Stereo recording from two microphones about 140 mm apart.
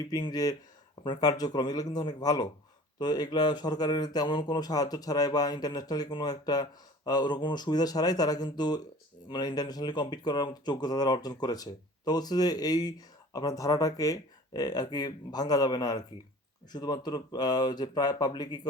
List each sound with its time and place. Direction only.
0.1 s speech: 30° left (ahead or behind)